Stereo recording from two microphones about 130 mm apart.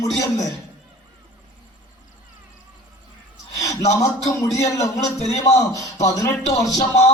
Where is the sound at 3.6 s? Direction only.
25° left (ahead or behind).